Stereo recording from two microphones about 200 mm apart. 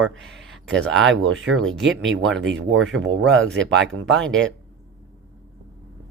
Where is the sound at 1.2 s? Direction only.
70° right (ahead or behind).